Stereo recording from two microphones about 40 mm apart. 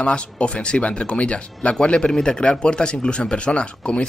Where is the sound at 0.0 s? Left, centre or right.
Left.